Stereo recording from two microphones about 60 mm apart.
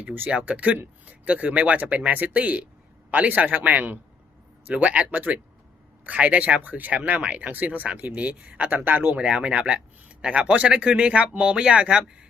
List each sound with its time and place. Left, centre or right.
0.3 s speech: right
9.1 s speech: centre